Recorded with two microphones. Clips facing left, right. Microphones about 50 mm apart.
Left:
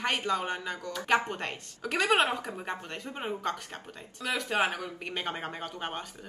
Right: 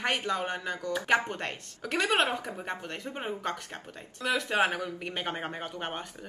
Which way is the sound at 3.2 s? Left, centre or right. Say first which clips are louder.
Left 2 dB; right.